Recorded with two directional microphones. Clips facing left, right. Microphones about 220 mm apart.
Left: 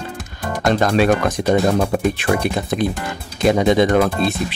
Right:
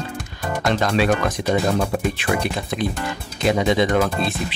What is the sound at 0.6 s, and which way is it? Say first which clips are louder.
Speech: left 4 dB; 45° left (ahead or behind).